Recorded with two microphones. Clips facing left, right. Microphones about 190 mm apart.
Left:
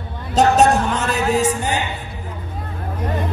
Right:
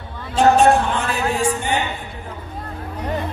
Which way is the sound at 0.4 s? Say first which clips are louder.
Even; 40° left (ahead or behind).